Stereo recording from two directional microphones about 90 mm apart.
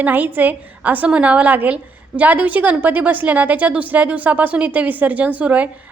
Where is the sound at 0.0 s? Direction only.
20° right (ahead or behind).